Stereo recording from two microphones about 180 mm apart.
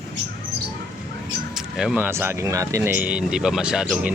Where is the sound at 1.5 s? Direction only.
5° right (ahead or behind).